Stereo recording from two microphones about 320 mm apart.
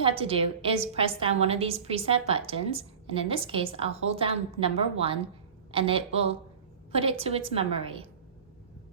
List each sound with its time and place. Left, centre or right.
0.0 s a woman's voice: centre